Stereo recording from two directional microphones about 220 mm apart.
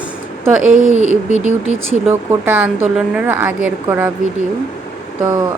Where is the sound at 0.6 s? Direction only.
35° right (ahead or behind).